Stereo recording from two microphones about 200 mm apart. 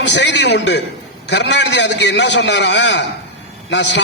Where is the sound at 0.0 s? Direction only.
60° left (ahead or behind).